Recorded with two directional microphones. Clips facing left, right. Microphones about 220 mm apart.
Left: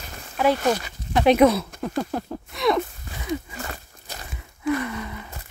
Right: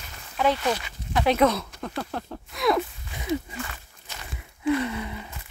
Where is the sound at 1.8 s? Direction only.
10° left (ahead or behind).